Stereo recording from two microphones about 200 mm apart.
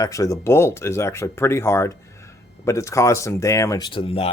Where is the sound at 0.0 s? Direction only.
15° left (ahead or behind).